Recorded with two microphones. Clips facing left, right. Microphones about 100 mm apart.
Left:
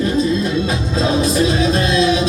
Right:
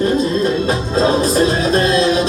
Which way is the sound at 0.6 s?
40° right (ahead or behind).